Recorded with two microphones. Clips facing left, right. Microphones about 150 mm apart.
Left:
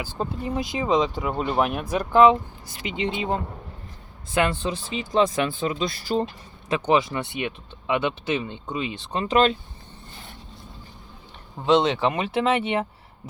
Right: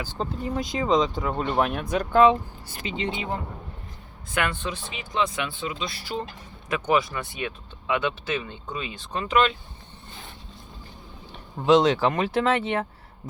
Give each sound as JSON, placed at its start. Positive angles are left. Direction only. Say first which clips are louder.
{"t": 0.0, "sound": "speech", "louder": "left 1 dB", "side_deg": 10}
{"t": 3.2, "sound": "speech", "louder": "left 4 dB", "side_deg": 20}
{"t": 6.7, "sound": "speech", "louder": "left 2 dB", "side_deg": 25}
{"t": 11.6, "sound": "speech", "louder": "right 1 dB", "side_deg": 0}